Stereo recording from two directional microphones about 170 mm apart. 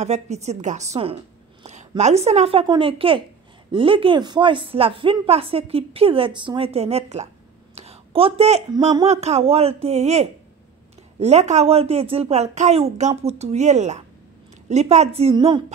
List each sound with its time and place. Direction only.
0.0 s a woman's voice: 40° right (ahead or behind)
7.7 s a sound: 35° right (ahead or behind)
8.4 s speech: 40° right (ahead or behind)